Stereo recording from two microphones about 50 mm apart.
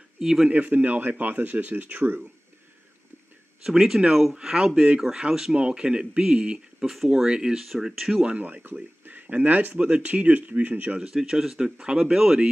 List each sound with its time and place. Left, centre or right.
0.2 s speech: centre
0.5 s speech: right
3.6 s speech: centre
7.6 s speech: centre
8.3 s speech: right
9.0 s speech: right
11.0 s speech: centre